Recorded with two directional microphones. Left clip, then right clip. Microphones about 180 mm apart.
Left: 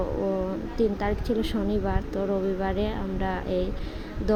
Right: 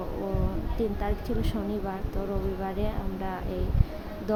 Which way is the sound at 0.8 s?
20° left (ahead or behind).